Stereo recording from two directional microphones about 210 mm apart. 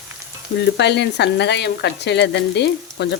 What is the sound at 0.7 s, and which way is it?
Frying, 55° left (ahead or behind).